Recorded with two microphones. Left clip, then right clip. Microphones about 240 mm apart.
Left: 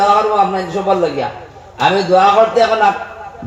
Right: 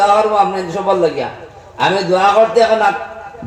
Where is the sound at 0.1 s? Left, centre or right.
Right.